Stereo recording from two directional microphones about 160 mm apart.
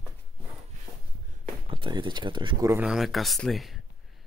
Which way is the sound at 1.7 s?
30° right (ahead or behind).